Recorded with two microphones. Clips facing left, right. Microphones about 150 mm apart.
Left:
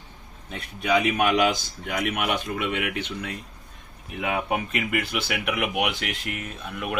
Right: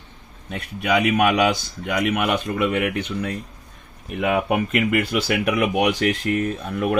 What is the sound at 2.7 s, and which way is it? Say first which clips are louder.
Speech: right 6 dB; 40° right (ahead or behind).